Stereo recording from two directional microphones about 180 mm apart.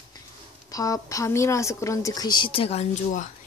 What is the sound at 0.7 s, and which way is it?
A woman's voice, 20° left (ahead or behind).